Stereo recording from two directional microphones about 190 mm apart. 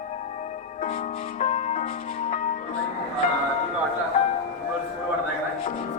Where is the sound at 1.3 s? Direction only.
35° left (ahead or behind).